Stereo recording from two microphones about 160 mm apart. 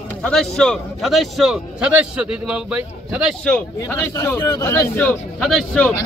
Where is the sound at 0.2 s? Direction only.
5° left (ahead or behind).